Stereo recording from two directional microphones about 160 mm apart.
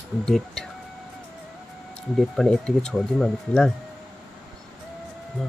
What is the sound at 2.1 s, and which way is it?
Speech, centre (ahead or behind).